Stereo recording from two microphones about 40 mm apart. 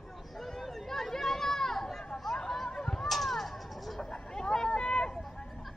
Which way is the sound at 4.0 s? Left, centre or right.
Left.